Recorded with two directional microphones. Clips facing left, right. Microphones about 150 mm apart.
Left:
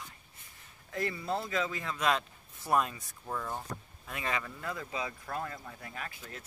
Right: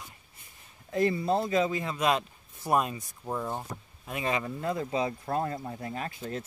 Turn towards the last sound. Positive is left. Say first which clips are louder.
# right 9 dB
turn(degrees=-30)  # may be behind; listen again after turning